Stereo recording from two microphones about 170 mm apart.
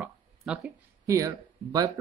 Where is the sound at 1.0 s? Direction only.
20° right (ahead or behind).